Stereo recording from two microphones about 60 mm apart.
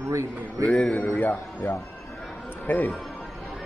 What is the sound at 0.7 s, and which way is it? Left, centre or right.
Speech, left.